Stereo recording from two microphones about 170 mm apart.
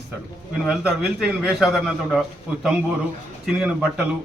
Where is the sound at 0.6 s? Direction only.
5° right (ahead or behind).